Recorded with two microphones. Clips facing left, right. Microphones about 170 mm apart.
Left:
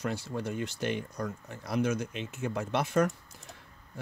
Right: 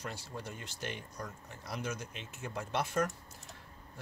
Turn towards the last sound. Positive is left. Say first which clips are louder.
# left 6 dB
turn(degrees=70)  # may be behind; listen again after turning